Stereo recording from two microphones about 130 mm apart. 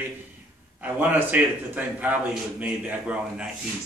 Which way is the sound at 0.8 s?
10° right (ahead or behind).